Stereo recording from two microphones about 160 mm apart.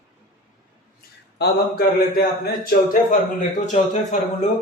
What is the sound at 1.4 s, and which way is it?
A man's voice, 75° left (ahead or behind).